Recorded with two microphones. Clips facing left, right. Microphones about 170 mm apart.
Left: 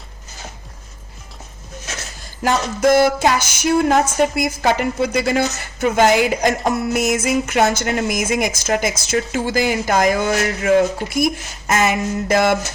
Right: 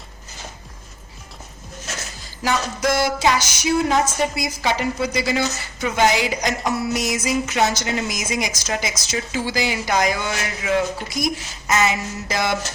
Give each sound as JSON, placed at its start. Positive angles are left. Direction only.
{"t": 2.4, "sound": "speech", "side_deg": 50}